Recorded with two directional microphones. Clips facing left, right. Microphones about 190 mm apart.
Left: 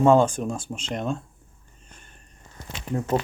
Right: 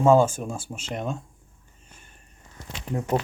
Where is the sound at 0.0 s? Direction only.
5° right (ahead or behind).